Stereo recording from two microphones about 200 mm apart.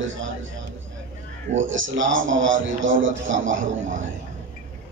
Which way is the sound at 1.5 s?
70° right (ahead or behind).